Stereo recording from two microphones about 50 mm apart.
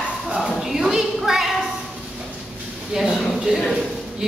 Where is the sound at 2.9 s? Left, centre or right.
Centre.